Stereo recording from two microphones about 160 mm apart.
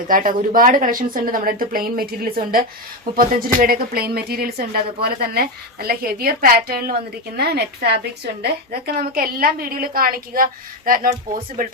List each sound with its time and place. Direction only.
0.1 s a woman's voice: 60° right (ahead or behind)
7.3 s a woman's voice: 85° right
9.0 s a woman's voice: 65° right (ahead or behind)